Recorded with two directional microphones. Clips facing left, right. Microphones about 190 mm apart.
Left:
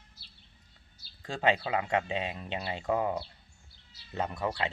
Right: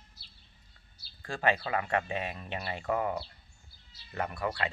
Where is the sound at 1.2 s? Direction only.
20° left (ahead or behind).